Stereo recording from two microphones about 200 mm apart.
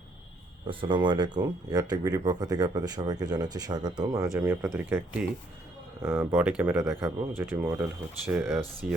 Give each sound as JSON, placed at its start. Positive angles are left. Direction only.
{"t": 0.7, "sound": "speech", "side_deg": -25}